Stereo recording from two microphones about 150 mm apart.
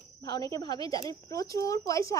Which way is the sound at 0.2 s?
25° left (ahead or behind).